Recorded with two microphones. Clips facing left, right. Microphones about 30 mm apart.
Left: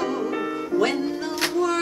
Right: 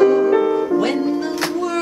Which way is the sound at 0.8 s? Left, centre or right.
Centre.